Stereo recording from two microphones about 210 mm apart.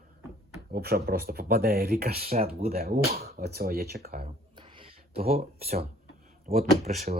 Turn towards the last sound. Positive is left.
turn(degrees=-30)  # may be behind; listen again after turning